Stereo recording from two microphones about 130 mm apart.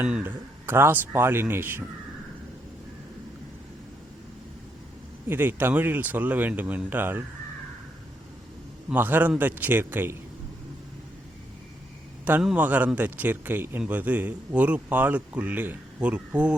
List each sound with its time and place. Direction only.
0.0 s a man's voice: 10° right (ahead or behind)
5.3 s a man's voice: 15° right (ahead or behind)
8.9 s a man's voice: 15° right (ahead or behind)
12.2 s a man's voice: 10° right (ahead or behind)